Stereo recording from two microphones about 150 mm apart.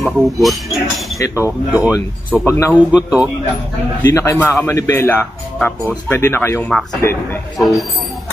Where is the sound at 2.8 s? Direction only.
5° right (ahead or behind).